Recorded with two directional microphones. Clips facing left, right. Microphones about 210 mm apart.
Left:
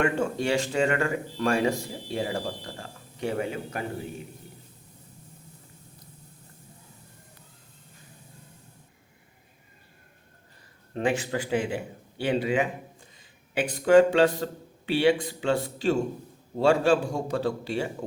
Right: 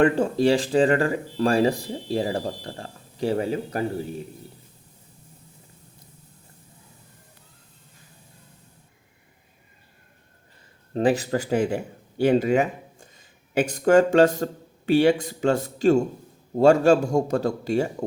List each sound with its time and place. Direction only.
0.0 s speech: 35° right (ahead or behind)
10.9 s a man's voice: 35° right (ahead or behind)